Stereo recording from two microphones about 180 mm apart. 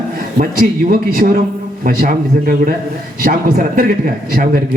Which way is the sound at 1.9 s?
50° right (ahead or behind).